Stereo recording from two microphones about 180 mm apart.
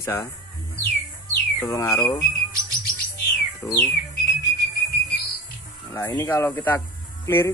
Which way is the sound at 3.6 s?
15° left (ahead or behind).